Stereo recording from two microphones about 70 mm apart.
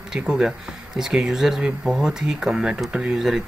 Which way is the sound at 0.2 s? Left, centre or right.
Centre.